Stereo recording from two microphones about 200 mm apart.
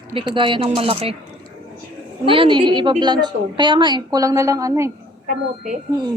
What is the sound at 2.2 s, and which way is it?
A woman's voice, 25° right (ahead or behind).